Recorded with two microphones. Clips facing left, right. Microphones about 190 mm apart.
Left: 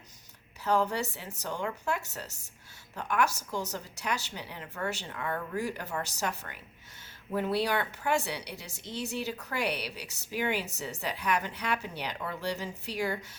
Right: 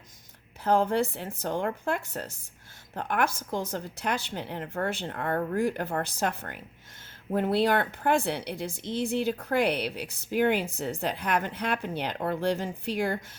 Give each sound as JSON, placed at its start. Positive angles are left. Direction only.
{"t": 0.6, "sound": "a woman's voice", "side_deg": -55}